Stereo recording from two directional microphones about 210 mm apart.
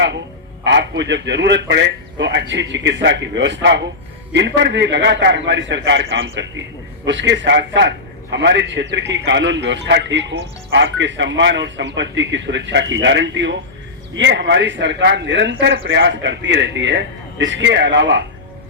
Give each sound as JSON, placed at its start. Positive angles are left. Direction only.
{"t": 0.6, "sound": "a man's voice", "side_deg": -60}